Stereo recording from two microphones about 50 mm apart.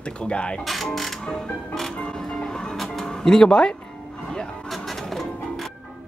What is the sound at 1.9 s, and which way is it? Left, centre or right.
Speech, left.